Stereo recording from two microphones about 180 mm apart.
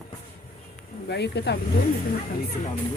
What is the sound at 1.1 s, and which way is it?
Speech, 70° left (ahead or behind).